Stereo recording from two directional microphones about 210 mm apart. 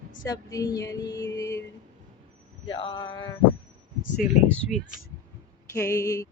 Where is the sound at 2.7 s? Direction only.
25° left (ahead or behind).